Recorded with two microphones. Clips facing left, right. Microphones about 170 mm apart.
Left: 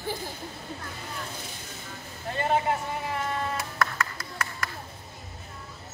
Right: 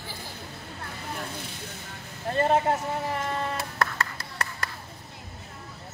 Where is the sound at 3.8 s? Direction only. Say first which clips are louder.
Even; 35° right (ahead or behind).